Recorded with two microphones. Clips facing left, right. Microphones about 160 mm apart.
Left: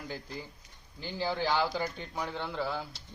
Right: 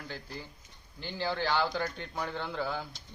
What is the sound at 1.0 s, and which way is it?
A man's voice, 5° left (ahead or behind).